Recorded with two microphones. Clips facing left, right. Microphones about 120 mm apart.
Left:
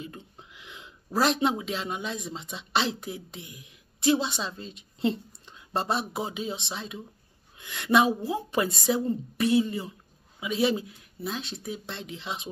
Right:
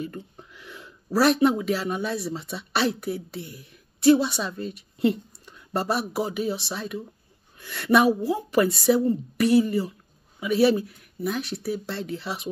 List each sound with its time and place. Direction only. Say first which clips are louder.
0.0 s a woman's voice: right 7 dB; 20° left (ahead or behind)